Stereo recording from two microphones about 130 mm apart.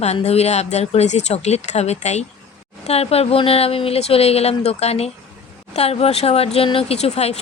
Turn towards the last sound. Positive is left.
turn(degrees=55)  # may be behind; listen again after turning